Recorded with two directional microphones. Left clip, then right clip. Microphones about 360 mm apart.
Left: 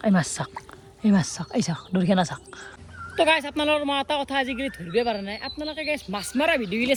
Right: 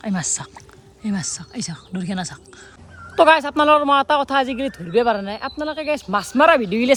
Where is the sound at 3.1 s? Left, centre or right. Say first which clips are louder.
Right 8 dB; centre.